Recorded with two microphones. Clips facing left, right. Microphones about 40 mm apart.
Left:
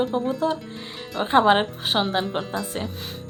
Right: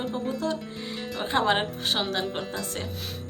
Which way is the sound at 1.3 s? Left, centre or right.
Left.